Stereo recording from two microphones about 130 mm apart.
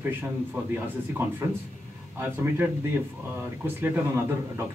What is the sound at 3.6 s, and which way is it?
Speech, 15° right (ahead or behind).